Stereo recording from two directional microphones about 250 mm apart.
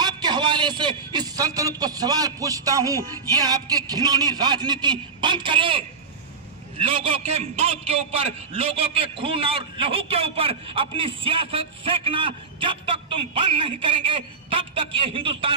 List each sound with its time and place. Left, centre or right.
0.0 s a man's voice: centre